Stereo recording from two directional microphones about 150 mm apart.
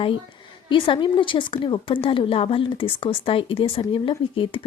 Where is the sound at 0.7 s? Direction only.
30° left (ahead or behind).